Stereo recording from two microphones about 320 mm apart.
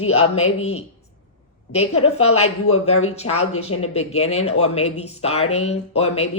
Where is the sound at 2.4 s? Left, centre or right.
Left.